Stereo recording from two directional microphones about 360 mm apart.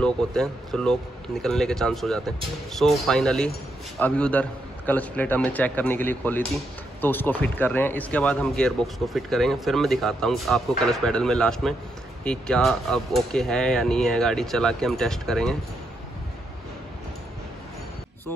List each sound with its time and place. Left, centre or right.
0.0 s speech: centre